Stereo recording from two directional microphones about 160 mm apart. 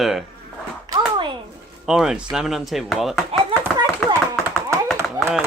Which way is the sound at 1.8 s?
5° right (ahead or behind).